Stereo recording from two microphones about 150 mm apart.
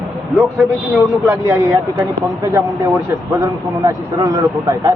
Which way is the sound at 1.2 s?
15° right (ahead or behind).